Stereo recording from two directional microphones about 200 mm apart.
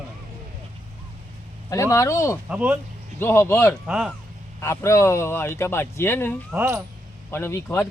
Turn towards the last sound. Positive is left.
turn(degrees=10)  # may be behind; listen again after turning